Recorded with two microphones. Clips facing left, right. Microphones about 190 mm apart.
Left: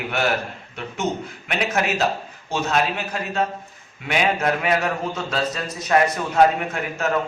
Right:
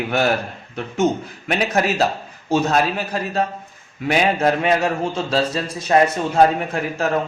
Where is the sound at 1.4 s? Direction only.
35° right (ahead or behind).